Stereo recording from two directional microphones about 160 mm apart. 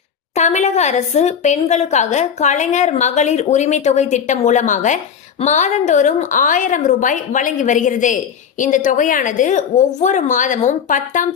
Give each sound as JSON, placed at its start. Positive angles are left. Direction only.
{"t": 0.3, "sound": "a woman's voice", "side_deg": 45}